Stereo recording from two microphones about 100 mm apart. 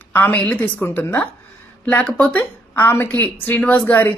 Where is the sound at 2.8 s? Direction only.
25° left (ahead or behind).